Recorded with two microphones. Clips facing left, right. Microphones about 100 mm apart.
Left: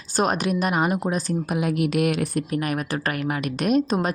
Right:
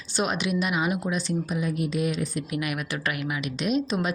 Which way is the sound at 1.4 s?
75° left (ahead or behind).